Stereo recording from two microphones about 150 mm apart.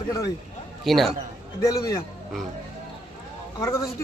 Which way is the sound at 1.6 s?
20° left (ahead or behind).